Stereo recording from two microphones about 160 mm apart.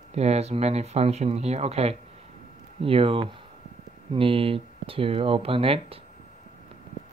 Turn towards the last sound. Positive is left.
turn(degrees=-35)  # may be behind; listen again after turning